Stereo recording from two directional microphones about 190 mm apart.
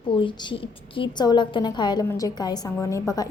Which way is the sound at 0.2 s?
25° left (ahead or behind).